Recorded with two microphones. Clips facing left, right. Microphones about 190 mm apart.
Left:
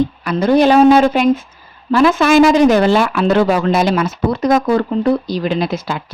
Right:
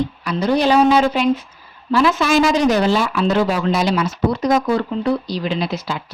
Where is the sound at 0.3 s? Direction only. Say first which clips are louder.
Left 5 dB; 50° left (ahead or behind).